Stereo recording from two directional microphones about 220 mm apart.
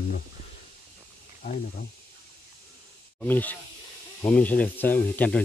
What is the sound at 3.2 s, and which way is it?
Speech, 5° left (ahead or behind).